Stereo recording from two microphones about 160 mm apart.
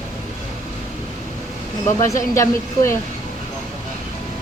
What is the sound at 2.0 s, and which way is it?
Speech, 20° left (ahead or behind).